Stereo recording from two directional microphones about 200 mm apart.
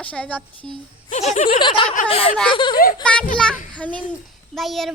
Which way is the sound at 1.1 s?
40° left (ahead or behind).